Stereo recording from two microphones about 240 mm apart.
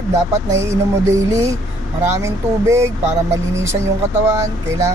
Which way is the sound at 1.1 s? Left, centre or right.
Centre.